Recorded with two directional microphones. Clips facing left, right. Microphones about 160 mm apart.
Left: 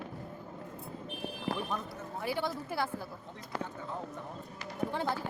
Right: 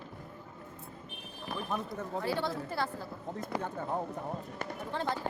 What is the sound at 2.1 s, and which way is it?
Speech, 90° right.